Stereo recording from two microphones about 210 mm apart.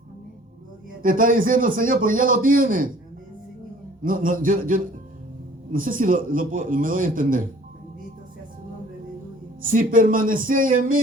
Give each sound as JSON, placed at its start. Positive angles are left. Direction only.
{"t": 1.0, "sound": "a man's voice", "side_deg": -40}
{"t": 4.0, "sound": "a man's voice", "side_deg": -40}
{"t": 9.6, "sound": "a man's voice", "side_deg": -40}